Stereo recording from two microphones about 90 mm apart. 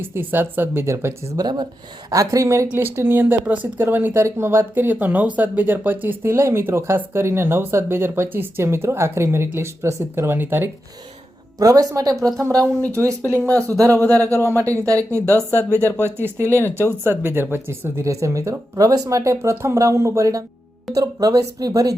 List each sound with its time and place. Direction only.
0.0 s speech: 25° right (ahead or behind)
1.4 s speech: 50° right (ahead or behind)
2.0 s speech: 40° right (ahead or behind)
11.6 s speech: 40° right (ahead or behind)
15.8 s speech: 25° left (ahead or behind)
16.0 s speech: 25° right (ahead or behind)
16.4 s speech: 25° left (ahead or behind)
17.0 s speech: 25° right (ahead or behind)